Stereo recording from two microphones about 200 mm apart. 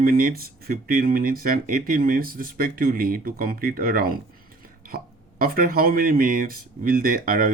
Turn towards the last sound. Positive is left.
turn(degrees=-45)  # may be behind; listen again after turning